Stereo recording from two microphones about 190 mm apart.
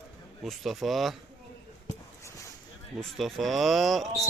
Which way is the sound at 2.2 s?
15° left (ahead or behind).